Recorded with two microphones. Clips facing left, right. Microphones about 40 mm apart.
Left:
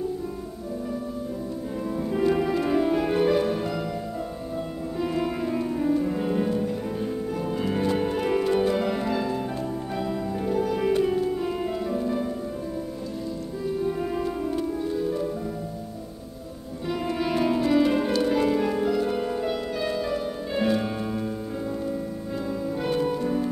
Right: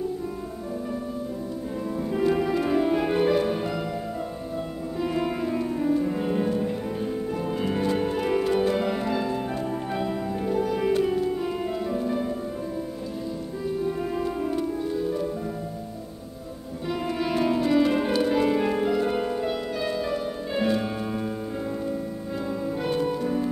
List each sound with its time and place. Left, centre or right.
2.0 s music: centre
5.0 s music: centre
10.4 s music: centre
13.7 s music: centre
17.0 s music: centre
19.3 s music: centre
22.8 s music: centre